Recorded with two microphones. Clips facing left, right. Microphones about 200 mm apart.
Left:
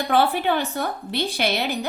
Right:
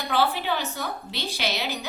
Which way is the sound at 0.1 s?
55° left (ahead or behind).